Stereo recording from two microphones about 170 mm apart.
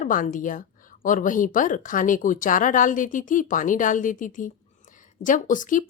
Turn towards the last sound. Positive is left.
turn(degrees=50)  # may be behind; listen again after turning